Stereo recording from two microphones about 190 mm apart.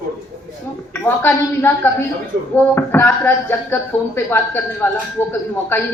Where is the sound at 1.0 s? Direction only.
10° left (ahead or behind).